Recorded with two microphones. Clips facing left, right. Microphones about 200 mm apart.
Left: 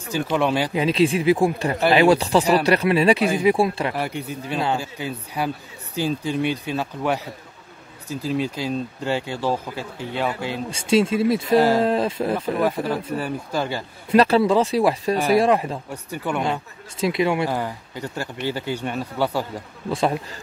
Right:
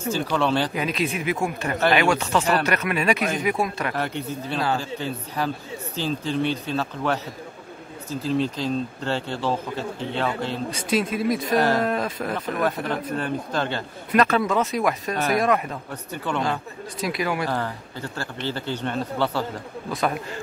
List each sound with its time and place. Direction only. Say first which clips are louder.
0.1 s speech: left 2 dB; 15° left (ahead or behind)
0.7 s speech: left 7 dB; 30° left (ahead or behind)
3.9 s speech: even; 10° left (ahead or behind)
10.7 s speech: left 7 dB; 25° left (ahead or behind)
12.6 s speech: left 2 dB; 10° left (ahead or behind)
14.1 s speech: left 4 dB; 30° left (ahead or behind)
15.9 s speech: even; 10° left (ahead or behind)
17.0 s speech: left 5 dB; 25° left (ahead or behind)
17.5 s speech: left 1 dB; 10° left (ahead or behind)
19.9 s speech: left 4 dB; 30° left (ahead or behind)